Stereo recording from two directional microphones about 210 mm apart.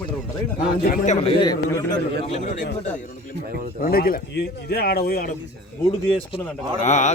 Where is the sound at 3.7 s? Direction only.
45° left (ahead or behind).